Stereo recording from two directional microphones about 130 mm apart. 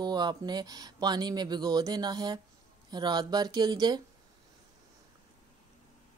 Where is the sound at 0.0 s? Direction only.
35° right (ahead or behind).